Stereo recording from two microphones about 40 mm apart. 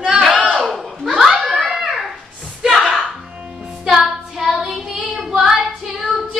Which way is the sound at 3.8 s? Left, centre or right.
Centre.